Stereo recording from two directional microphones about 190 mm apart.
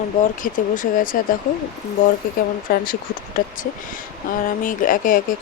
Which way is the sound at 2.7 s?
50° left (ahead or behind).